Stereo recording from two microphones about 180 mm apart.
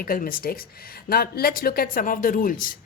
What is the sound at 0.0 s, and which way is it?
A woman's voice, 55° left (ahead or behind).